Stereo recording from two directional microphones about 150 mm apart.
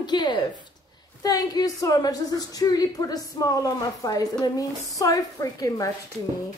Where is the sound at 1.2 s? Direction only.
25° left (ahead or behind).